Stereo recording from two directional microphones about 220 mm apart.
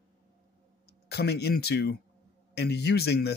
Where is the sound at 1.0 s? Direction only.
50° left (ahead or behind).